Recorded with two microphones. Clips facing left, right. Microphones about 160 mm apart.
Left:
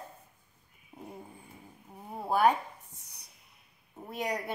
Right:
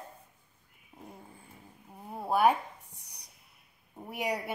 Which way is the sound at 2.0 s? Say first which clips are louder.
Even; centre (ahead or behind).